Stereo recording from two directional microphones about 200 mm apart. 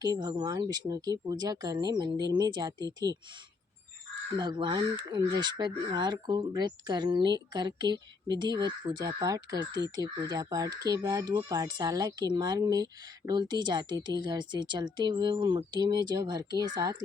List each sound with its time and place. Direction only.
0.0 s speech: 20° right (ahead or behind)
4.4 s speech: 25° right (ahead or behind)